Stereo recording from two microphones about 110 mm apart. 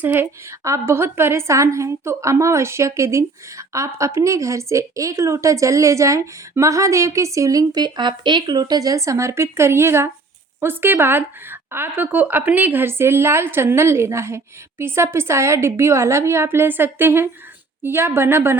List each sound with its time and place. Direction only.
0.0 s a woman's voice: 20° right (ahead or behind)